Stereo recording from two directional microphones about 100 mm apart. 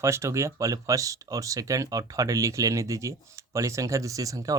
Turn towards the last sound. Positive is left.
turn(degrees=-35)  # may be behind; listen again after turning